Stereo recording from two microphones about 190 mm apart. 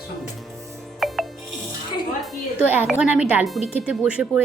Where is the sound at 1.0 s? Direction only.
Centre (ahead or behind).